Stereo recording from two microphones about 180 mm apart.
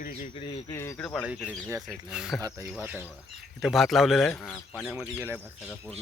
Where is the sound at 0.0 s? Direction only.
50° left (ahead or behind).